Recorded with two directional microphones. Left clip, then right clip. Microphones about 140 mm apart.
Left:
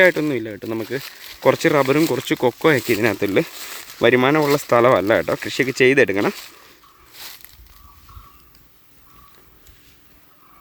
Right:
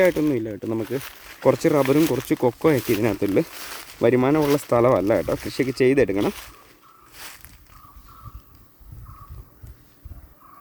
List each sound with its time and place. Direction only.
0.0 s speech: 5° left (ahead or behind)
0.3 s speech: 15° right (ahead or behind)
0.9 s speech: 5° left (ahead or behind)
1.2 s speech: 20° left (ahead or behind)
1.5 s speech: 5° right (ahead or behind)
1.8 s speech: 10° left (ahead or behind)
2.2 s speech: 10° right (ahead or behind)
3.5 s a sound: 15° left (ahead or behind)
4.0 s speech: centre (ahead or behind)
7.2 s walk: 20° left (ahead or behind)